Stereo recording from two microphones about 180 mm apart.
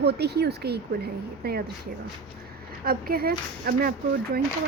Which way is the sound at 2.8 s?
55° right (ahead or behind).